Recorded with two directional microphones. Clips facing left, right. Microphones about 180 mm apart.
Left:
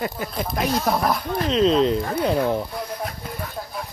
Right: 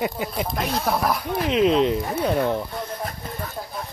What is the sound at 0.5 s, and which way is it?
Speech, centre (ahead or behind).